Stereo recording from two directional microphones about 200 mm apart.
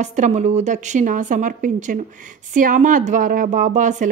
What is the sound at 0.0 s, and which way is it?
A woman's voice, 35° right (ahead or behind).